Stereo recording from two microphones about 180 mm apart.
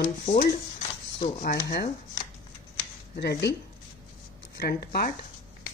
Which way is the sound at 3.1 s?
65° left (ahead or behind).